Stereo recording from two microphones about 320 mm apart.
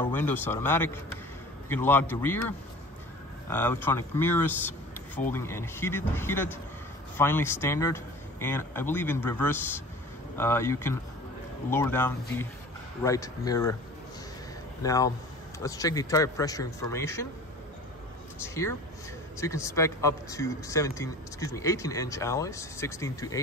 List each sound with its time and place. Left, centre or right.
0.0 s speech: centre
14.8 s speech: centre
18.5 s speech: centre